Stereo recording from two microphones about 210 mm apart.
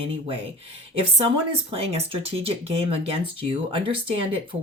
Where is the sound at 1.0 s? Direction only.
25° right (ahead or behind).